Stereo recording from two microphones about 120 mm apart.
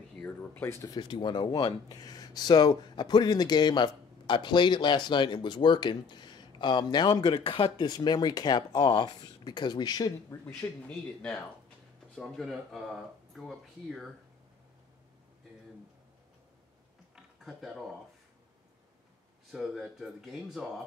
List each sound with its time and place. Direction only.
0.2 s a sound: 15° left (ahead or behind)
0.9 s speech: 40° left (ahead or behind)
12.2 s speech: centre (ahead or behind)
17.1 s mechanisms: centre (ahead or behind)
19.5 s speech: centre (ahead or behind)